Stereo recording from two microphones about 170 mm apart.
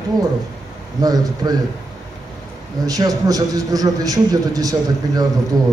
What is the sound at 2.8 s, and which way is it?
A man's voice, 20° right (ahead or behind).